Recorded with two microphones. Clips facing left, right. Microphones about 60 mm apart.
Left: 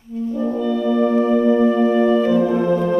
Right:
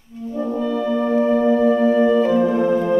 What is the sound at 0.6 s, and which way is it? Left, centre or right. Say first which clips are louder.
Music: left 3 dB; centre.